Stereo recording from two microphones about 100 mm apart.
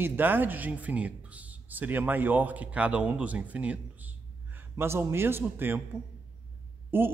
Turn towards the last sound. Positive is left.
turn(degrees=-20)  # may be behind; listen again after turning